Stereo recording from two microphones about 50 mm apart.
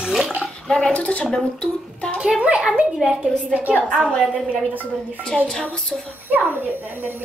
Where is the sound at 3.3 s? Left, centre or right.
Centre.